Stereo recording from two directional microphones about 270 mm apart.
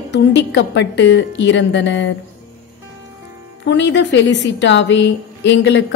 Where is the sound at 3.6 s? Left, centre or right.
Left.